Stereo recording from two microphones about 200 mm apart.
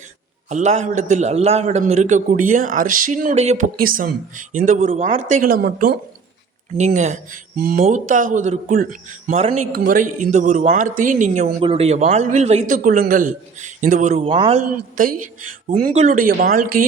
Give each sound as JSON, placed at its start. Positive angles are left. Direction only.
{"t": 0.4, "sound": "a man's voice", "side_deg": -35}
{"t": 6.7, "sound": "a man's voice", "side_deg": -35}
{"t": 15.0, "sound": "speech", "side_deg": -45}